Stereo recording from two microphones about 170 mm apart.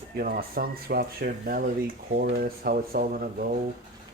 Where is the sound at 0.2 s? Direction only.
60° right (ahead or behind).